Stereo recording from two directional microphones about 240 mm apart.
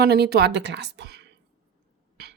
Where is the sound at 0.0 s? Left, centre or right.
Right.